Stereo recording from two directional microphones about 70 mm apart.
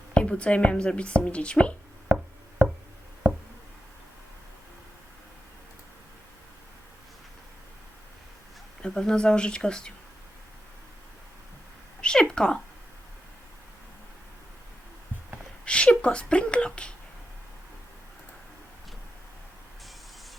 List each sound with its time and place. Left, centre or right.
0.1 s speech: centre
8.8 s speech: centre
12.0 s a sound: centre
15.6 s speech: centre